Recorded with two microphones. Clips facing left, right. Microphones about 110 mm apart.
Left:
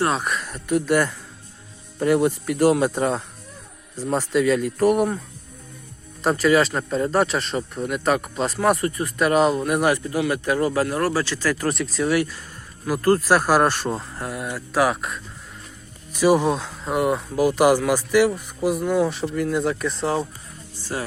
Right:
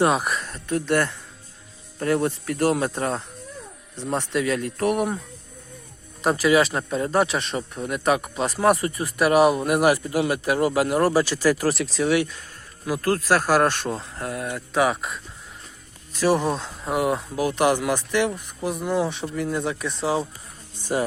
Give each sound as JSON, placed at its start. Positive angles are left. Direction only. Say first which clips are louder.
{"t": 0.0, "sound": "speech", "louder": "right 2 dB", "side_deg": -10}
{"t": 0.4, "sound": "speech", "louder": "left 3 dB", "side_deg": 15}
{"t": 6.2, "sound": "speech", "louder": "left 1 dB", "side_deg": -5}
{"t": 20.7, "sound": "music", "louder": "right 4 dB", "side_deg": -20}